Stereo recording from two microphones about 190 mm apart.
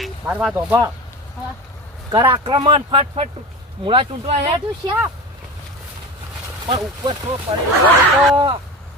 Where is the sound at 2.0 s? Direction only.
25° right (ahead or behind).